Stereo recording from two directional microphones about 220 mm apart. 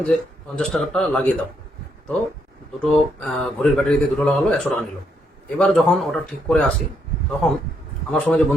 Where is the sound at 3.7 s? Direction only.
Centre (ahead or behind).